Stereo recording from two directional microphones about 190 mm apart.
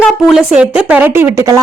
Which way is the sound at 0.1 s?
Centre (ahead or behind).